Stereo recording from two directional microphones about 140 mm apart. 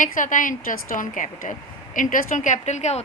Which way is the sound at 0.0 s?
65° left (ahead or behind).